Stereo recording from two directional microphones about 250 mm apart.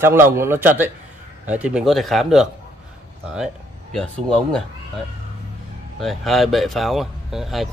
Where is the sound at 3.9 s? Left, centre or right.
Centre.